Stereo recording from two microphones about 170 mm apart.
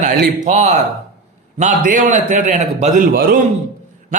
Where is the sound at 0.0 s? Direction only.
55° right (ahead or behind).